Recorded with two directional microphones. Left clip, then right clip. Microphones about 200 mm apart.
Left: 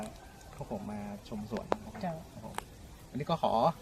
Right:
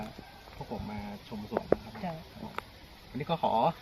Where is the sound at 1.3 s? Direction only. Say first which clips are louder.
Left 1 dB; 25° left (ahead or behind).